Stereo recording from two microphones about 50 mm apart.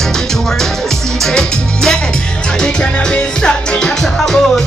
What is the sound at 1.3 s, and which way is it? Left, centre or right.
Music, centre.